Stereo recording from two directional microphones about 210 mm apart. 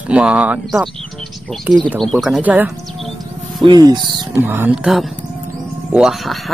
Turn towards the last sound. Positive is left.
turn(degrees=0)  # may be behind; listen again after turning